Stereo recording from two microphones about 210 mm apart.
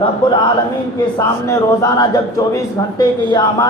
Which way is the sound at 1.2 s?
15° left (ahead or behind).